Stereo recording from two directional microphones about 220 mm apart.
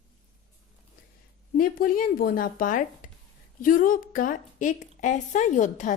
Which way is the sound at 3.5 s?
40° left (ahead or behind).